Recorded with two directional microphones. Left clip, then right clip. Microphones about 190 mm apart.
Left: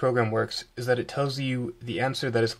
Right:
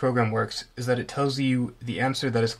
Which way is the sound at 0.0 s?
30° left (ahead or behind).